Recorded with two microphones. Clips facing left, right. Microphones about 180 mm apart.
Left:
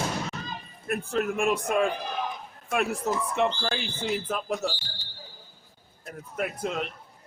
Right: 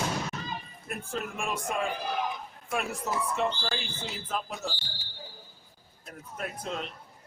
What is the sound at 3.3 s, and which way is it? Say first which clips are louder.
Speech: left 4 dB; 60° left (ahead or behind).